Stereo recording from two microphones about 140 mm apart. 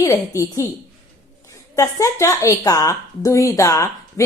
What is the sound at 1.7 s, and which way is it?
A woman's voice, 20° left (ahead or behind).